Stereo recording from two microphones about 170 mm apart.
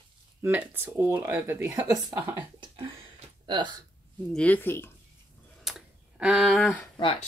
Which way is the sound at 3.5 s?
25° right (ahead or behind).